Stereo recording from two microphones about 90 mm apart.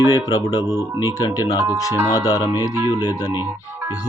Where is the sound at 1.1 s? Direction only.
40° left (ahead or behind).